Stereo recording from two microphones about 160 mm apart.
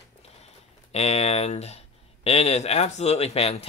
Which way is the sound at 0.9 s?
40° left (ahead or behind).